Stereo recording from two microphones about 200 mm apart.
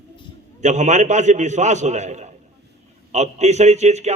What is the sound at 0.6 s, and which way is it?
A man's voice, 35° right (ahead or behind).